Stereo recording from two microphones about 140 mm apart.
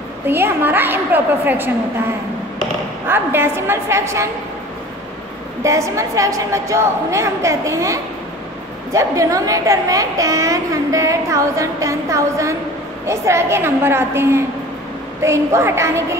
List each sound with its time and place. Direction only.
0.3 s a woman's voice: 15° right (ahead or behind)
3.1 s a woman's voice: 15° right (ahead or behind)
5.6 s a woman's voice: 20° right (ahead or behind)